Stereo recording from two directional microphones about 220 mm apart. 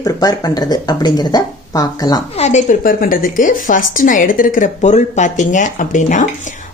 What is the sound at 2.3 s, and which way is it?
A woman's voice, 30° left (ahead or behind).